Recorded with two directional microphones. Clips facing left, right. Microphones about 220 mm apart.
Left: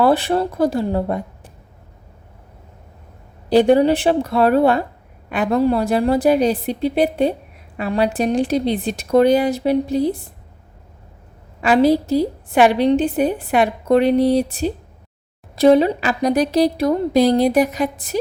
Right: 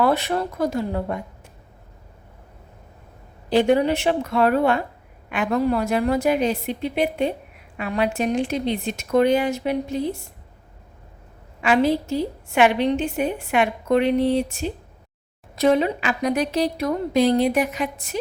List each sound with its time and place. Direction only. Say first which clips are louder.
0.0 s a woman's voice: left 5 dB; 30° left (ahead or behind)
3.5 s a woman's voice: left 5 dB; 35° left (ahead or behind)
11.6 s a woman's voice: left 5 dB; 35° left (ahead or behind)